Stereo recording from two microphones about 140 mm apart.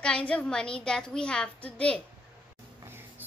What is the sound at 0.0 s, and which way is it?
A woman's voice, 5° left (ahead or behind).